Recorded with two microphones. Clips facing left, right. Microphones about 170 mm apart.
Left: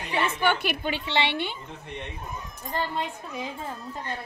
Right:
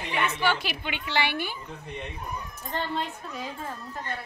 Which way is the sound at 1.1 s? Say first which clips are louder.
Even; 25° left (ahead or behind).